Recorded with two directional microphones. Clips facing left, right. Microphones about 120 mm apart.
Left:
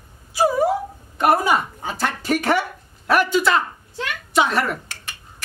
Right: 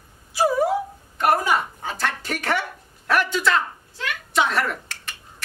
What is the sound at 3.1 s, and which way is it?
Speech, 5° left (ahead or behind).